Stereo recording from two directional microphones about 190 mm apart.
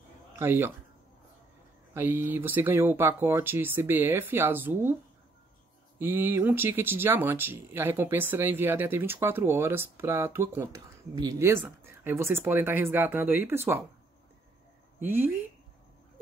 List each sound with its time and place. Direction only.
0.4 s speech: 10° right (ahead or behind)
2.0 s speech: 10° right (ahead or behind)
5.9 s speech: 10° right (ahead or behind)
15.0 s speech: 10° right (ahead or behind)